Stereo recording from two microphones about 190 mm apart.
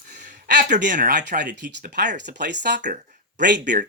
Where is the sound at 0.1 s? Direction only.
40° right (ahead or behind).